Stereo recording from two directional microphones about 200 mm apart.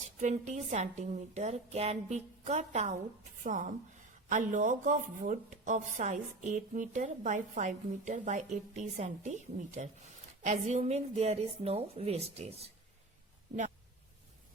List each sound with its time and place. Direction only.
0.0 s speech: 35° right (ahead or behind)